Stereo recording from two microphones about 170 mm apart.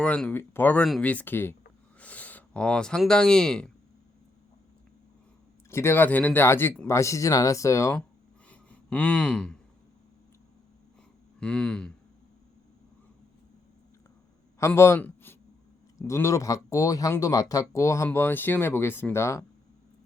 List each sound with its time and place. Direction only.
0.0 s speech: 5° left (ahead or behind)
5.7 s speech: 15° left (ahead or behind)
8.4 s a sound: 10° left (ahead or behind)
11.3 s speech: 5° left (ahead or behind)
14.6 s a man's voice: 15° left (ahead or behind)